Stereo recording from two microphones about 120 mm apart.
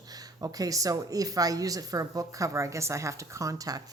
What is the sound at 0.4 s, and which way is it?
Speech, 30° right (ahead or behind).